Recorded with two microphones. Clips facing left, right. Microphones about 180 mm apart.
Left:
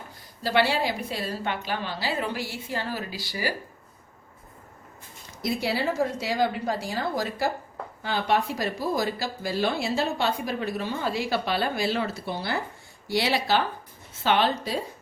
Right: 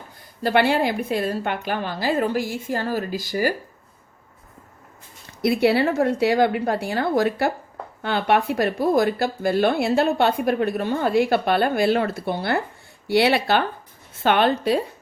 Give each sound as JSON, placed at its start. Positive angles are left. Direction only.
{"t": 0.4, "sound": "a woman's voice", "side_deg": -55}
{"t": 5.4, "sound": "speech", "side_deg": -65}